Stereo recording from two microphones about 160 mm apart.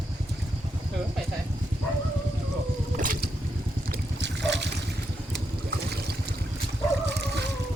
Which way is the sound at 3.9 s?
90° right.